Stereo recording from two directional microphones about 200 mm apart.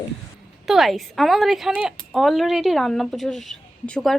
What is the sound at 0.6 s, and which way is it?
A woman's voice, centre (ahead or behind).